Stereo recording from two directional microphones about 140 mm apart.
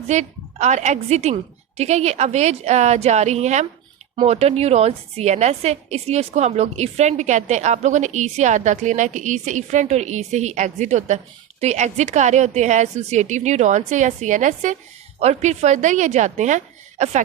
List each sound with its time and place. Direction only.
0.1 s a woman's voice: 55° right (ahead or behind)